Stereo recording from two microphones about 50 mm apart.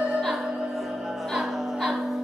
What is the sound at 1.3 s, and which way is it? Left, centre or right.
Music, centre.